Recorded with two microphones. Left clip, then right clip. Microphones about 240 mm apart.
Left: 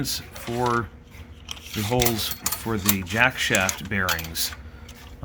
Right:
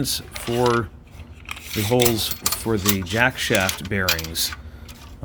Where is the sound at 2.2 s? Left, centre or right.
Centre.